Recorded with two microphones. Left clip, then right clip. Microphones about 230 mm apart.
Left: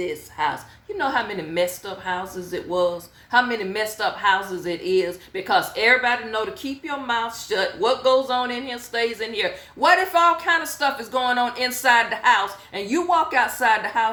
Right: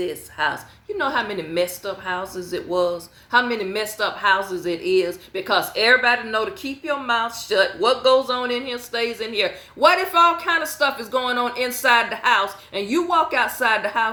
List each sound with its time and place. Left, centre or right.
0.0 s a woman's voice: centre
2.6 s speech: right
3.3 s a woman's voice: centre